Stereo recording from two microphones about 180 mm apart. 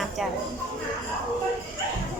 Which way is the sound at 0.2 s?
Centre (ahead or behind).